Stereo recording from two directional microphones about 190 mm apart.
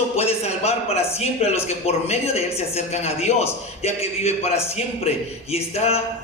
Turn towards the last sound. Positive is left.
turn(degrees=35)  # may be behind; listen again after turning